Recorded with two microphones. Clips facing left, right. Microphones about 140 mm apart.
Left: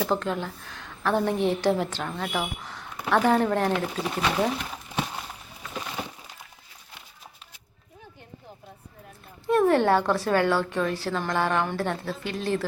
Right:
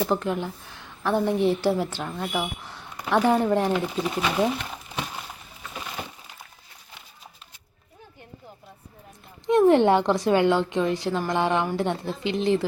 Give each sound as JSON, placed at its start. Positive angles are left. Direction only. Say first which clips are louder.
{"t": 0.0, "sound": "a woman's voice", "louder": "right 2 dB", "side_deg": -15}
{"t": 9.5, "sound": "a woman's voice", "louder": "right 3 dB", "side_deg": -20}